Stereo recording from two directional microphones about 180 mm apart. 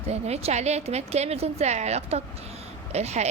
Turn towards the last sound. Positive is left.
turn(degrees=-35)  # may be behind; listen again after turning